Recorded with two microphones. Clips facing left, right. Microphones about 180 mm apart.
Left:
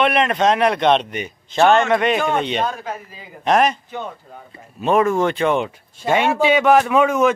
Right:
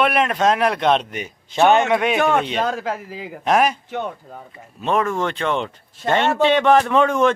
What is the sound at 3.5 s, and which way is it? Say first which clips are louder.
Speech: left 1 dB; 5° right (ahead or behind).